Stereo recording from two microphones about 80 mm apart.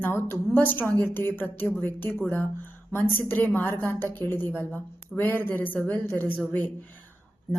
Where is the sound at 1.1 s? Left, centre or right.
Left.